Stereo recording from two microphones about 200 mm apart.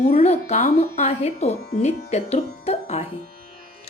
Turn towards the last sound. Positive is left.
turn(degrees=30)  # may be behind; listen again after turning